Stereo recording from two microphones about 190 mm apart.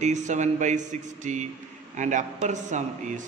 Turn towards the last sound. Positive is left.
turn(degrees=-40)  # may be behind; listen again after turning